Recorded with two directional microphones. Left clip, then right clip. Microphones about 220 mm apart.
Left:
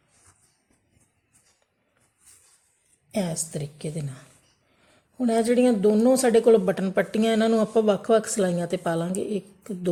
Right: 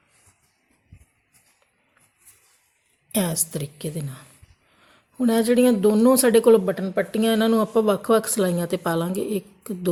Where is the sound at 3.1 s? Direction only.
30° right (ahead or behind).